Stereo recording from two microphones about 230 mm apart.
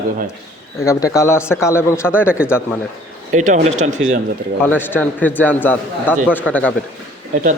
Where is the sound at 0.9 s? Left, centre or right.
Centre.